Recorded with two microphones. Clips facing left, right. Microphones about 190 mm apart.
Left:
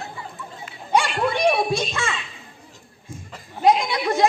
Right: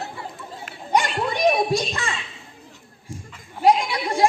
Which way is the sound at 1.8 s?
35° right (ahead or behind).